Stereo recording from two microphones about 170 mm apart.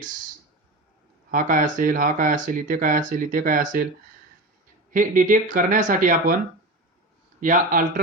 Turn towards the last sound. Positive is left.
turn(degrees=-50)  # may be behind; listen again after turning